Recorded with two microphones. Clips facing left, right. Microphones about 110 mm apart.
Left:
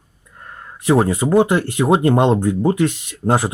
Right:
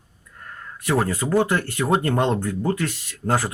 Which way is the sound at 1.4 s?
20° left (ahead or behind).